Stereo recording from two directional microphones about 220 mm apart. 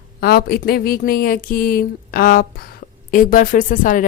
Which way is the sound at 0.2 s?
45° left (ahead or behind).